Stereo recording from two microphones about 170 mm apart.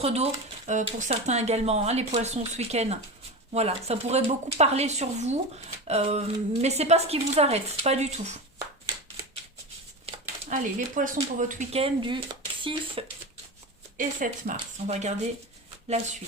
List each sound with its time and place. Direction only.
0.0 s a woman's voice: 35° right (ahead or behind)
10.5 s speech: 50° right (ahead or behind)
11.8 s speech: 30° right (ahead or behind)
13.9 s speech: 50° right (ahead or behind)